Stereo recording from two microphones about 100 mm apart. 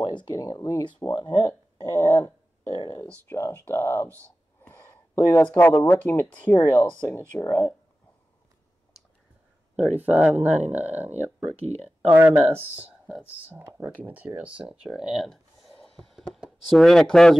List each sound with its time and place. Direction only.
0.0 s speech: 45° left (ahead or behind)
3.1 s speech: 25° left (ahead or behind)
9.9 s speech: 15° right (ahead or behind)
10.3 s speech: 90° right
10.7 s speech: 15° right (ahead or behind)
11.4 s speech: 90° right
12.1 s speech: 20° right (ahead or behind); by 15.7 s centre (ahead or behind)
15.8 s a sound: 5° left (ahead or behind)
16.4 s speech: 5° left (ahead or behind)